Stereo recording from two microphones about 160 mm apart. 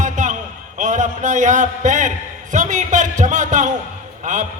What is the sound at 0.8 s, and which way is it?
A man's voice, 50° right (ahead or behind).